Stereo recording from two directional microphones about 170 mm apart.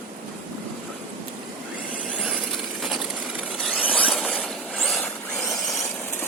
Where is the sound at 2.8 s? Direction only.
Centre (ahead or behind).